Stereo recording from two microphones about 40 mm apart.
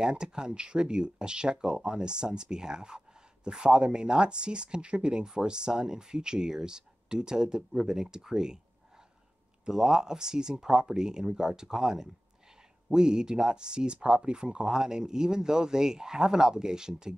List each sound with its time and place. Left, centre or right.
0.0 s speech: centre
9.7 s a man's voice: centre